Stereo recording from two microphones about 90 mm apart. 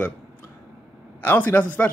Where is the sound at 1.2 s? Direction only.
20° left (ahead or behind).